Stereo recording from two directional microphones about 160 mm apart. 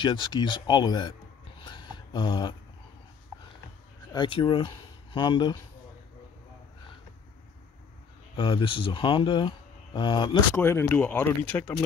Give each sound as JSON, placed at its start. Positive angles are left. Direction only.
{"t": 0.0, "sound": "speech", "side_deg": 30}
{"t": 1.6, "sound": "a sound", "side_deg": 30}
{"t": 4.1, "sound": "speech", "side_deg": 30}
{"t": 8.4, "sound": "speech", "side_deg": 30}
{"t": 10.5, "sound": "speech", "side_deg": 15}